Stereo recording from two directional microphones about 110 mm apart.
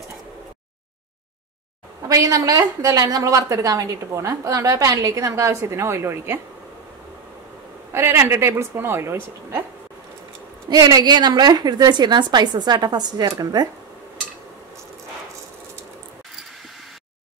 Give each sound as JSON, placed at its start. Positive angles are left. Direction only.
{"t": 2.0, "sound": "a woman's voice", "side_deg": -35}
{"t": 7.9, "sound": "a woman's voice", "side_deg": -25}
{"t": 10.7, "sound": "a woman's voice", "side_deg": -35}